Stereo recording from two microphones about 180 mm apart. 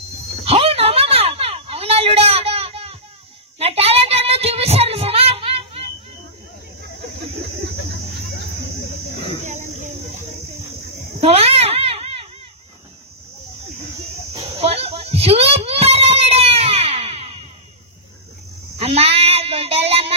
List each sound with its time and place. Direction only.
0.5 s a sound: 35° right (ahead or behind)
3.5 s child singing: 35° right (ahead or behind)
9.4 s cricket: 40° right (ahead or behind)
11.1 s a sound: 35° right (ahead or behind)
14.6 s child singing: 35° right (ahead or behind)
18.8 s child singing: 35° right (ahead or behind)